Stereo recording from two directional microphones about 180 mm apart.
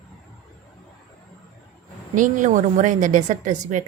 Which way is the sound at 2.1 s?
45° right (ahead or behind).